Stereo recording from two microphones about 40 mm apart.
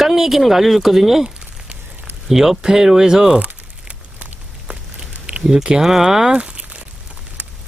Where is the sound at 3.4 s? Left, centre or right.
Right.